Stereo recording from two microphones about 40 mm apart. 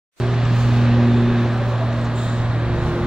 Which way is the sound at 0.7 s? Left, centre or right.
Centre.